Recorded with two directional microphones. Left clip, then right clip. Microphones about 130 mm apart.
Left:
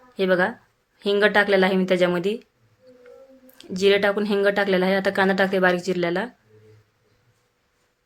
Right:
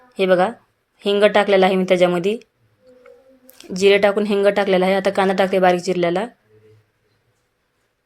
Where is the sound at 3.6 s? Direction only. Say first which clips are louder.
Right 5 dB; 30° right (ahead or behind).